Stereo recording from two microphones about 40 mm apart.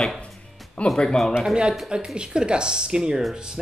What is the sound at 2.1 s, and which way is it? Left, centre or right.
Speech, right.